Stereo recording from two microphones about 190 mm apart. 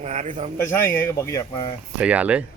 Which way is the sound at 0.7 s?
10° left (ahead or behind).